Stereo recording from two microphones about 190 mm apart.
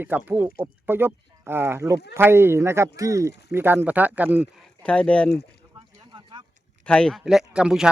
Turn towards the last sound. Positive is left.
turn(degrees=-5)  # may be behind; listen again after turning